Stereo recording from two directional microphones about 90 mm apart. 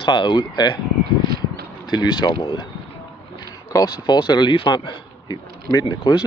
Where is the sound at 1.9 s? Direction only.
50° left (ahead or behind).